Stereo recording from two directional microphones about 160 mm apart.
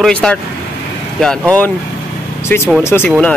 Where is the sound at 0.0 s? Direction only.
5° left (ahead or behind).